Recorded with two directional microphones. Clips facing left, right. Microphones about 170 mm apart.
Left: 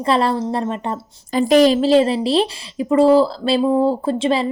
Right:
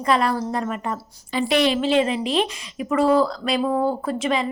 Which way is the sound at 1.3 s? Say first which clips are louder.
Left 7 dB; 40° left (ahead or behind).